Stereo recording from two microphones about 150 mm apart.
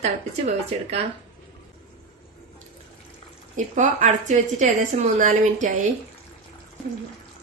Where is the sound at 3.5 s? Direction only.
55° right (ahead or behind).